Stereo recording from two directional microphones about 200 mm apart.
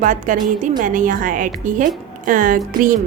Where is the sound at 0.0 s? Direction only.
40° right (ahead or behind).